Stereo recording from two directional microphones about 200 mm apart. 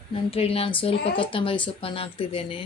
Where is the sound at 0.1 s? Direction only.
30° left (ahead or behind).